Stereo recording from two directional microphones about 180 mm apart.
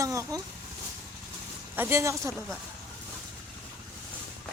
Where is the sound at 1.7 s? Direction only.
15° right (ahead or behind).